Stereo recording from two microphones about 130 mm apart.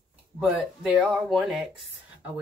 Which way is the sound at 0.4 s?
10° right (ahead or behind).